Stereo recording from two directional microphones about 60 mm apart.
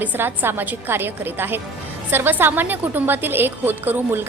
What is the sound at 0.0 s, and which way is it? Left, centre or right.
A woman's voice, right.